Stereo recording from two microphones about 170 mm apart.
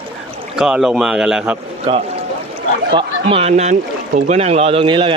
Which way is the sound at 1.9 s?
30° right (ahead or behind).